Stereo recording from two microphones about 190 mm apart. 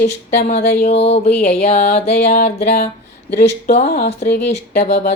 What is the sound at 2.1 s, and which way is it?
Music, 55° left (ahead or behind).